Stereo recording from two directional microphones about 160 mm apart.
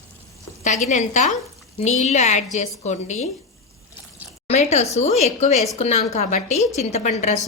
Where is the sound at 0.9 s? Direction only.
50° left (ahead or behind).